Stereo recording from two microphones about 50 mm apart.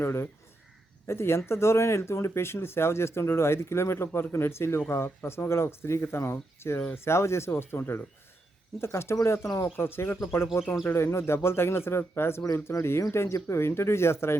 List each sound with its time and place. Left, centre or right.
0.0 s speech: left
9.7 s speech: left